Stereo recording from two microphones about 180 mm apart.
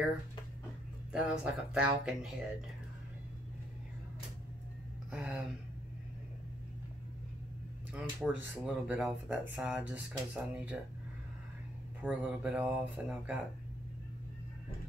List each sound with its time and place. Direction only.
1.1 s speech: 5° right (ahead or behind)
5.1 s speech: 5° right (ahead or behind)
7.9 s speech: 5° right (ahead or behind)
12.0 s speech: 10° right (ahead or behind)